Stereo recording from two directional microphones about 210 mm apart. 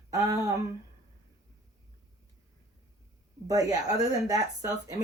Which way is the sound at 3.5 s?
15° right (ahead or behind).